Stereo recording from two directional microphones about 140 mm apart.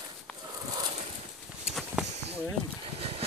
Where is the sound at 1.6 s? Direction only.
5° right (ahead or behind).